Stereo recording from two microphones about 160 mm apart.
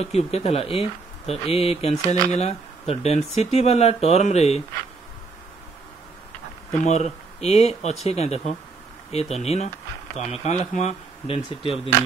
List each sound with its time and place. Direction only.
0.0 s speech: 40° left (ahead or behind)
6.8 s speech: 45° left (ahead or behind)